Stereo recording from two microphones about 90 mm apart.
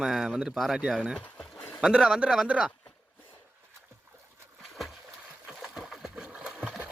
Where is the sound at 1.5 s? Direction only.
15° left (ahead or behind).